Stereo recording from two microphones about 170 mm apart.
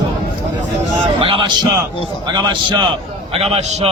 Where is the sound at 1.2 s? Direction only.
30° right (ahead or behind).